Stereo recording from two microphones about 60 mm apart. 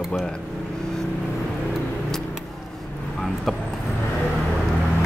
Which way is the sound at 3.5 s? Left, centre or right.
Centre.